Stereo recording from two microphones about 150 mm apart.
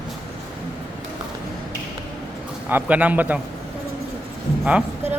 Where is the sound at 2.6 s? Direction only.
10° right (ahead or behind).